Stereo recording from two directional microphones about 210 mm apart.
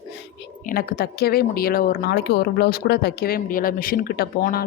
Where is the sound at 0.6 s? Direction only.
45° left (ahead or behind).